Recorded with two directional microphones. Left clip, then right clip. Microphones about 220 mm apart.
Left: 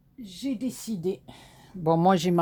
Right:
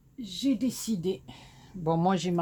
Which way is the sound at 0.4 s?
25° left (ahead or behind).